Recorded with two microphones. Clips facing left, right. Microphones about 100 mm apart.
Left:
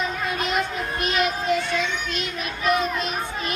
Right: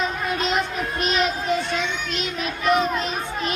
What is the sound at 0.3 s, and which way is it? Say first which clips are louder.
Music: right 2 dB; 20° right (ahead or behind).